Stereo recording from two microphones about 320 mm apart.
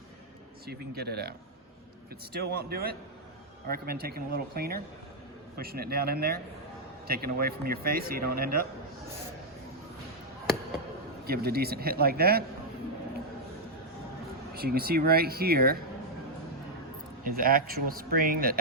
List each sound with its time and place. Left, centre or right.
0.7 s speech: right
2.4 s speech: right
11.3 s speech: right
14.5 s speech: right
17.2 s speech: right